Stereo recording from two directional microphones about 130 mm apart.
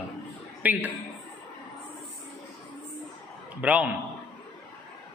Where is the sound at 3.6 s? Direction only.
10° right (ahead or behind).